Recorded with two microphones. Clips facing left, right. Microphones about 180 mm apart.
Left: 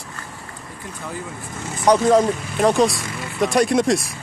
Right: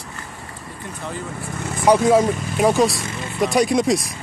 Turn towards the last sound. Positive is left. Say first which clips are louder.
# even
turn(degrees=0)  # may be behind; listen again after turning